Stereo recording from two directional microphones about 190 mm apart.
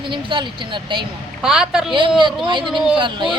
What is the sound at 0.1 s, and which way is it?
Speech, 25° right (ahead or behind).